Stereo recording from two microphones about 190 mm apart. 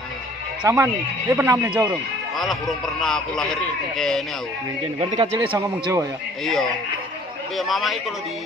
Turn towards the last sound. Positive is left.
turn(degrees=0)  # may be behind; listen again after turning